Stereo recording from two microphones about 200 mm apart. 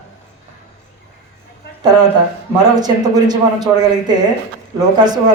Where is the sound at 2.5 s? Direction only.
20° right (ahead or behind).